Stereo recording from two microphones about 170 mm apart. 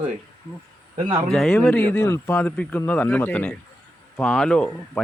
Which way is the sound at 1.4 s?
Centre (ahead or behind).